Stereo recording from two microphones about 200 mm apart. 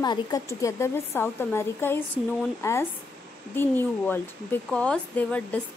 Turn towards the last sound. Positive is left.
turn(degrees=5)  # may be behind; listen again after turning